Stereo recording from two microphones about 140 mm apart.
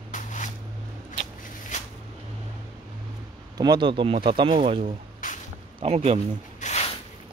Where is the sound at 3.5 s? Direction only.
30° right (ahead or behind).